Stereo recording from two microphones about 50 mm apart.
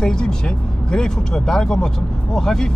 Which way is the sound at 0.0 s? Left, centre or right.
Centre.